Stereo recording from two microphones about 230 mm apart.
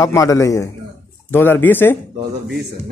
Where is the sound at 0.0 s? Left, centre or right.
Centre.